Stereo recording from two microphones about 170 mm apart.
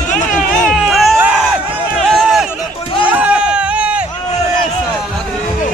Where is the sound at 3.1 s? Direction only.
10° right (ahead or behind).